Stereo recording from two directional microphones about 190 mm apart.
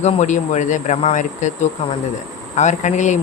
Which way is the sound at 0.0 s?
35° left (ahead or behind).